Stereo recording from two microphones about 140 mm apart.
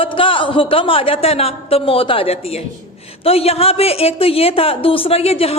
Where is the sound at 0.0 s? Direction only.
40° left (ahead or behind).